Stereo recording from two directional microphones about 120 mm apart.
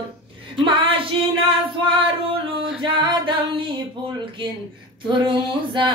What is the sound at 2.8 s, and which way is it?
Singing, 40° right (ahead or behind).